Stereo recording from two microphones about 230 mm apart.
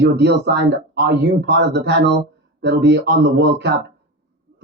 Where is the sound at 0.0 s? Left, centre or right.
Right.